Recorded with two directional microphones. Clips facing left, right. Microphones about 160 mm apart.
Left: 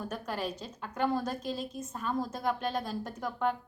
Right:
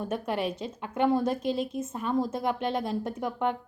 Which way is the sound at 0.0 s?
25° right (ahead or behind).